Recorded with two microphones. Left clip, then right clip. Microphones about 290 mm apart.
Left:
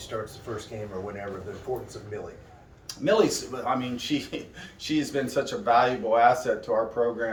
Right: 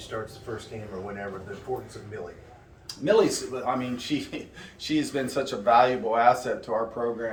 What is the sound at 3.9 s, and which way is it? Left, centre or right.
Speech, centre.